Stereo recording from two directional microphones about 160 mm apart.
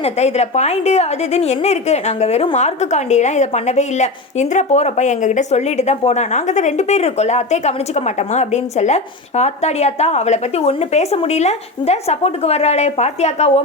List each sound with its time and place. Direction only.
0.0 s a woman's voice: 45° left (ahead or behind)